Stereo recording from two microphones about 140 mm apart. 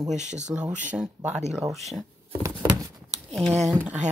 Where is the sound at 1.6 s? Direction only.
Centre (ahead or behind).